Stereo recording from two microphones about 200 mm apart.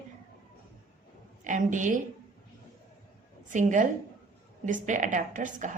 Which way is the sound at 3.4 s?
40° right (ahead or behind).